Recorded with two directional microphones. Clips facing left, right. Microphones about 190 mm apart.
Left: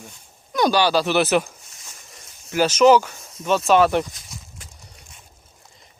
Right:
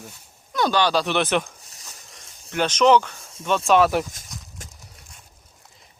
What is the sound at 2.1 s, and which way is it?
Speech, 5° left (ahead or behind).